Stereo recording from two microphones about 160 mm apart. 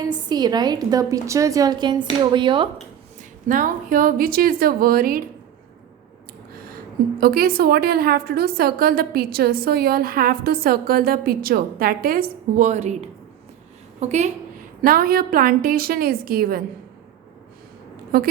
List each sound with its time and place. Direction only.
0.1 s a woman's voice: 25° right (ahead or behind)
3.5 s a woman's voice: 55° right (ahead or behind)
7.2 s a woman's voice: 70° right (ahead or behind); by 14.3 s 45° right (ahead or behind)
14.8 s a woman's voice: 65° right (ahead or behind)
18.1 s a woman's voice: 70° right (ahead or behind)